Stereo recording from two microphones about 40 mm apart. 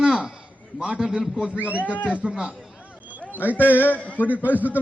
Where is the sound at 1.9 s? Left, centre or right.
Left.